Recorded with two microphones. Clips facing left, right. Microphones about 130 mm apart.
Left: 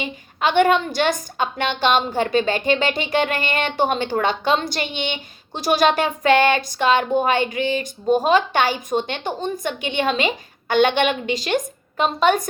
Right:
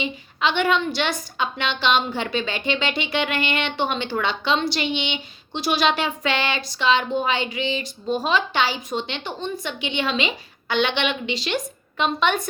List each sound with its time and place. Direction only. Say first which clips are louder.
0.0 s a woman's voice: left 2 dB; 45° left (ahead or behind)